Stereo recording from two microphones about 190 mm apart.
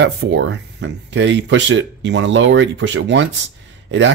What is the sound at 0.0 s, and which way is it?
Speech, 75° right (ahead or behind).